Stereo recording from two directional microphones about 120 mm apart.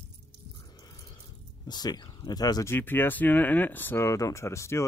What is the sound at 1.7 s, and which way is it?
Speech, 35° left (ahead or behind).